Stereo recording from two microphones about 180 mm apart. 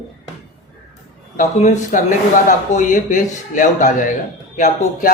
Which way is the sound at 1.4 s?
40° left (ahead or behind).